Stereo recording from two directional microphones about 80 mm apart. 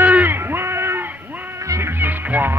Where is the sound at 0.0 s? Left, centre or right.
Right.